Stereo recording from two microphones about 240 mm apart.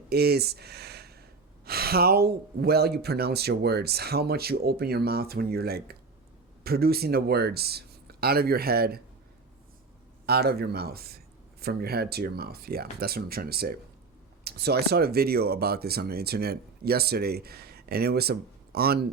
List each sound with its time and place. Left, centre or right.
0.1 s speech: right
10.2 s speech: right